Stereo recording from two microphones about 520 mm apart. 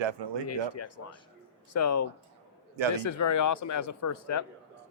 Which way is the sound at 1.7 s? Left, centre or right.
Left.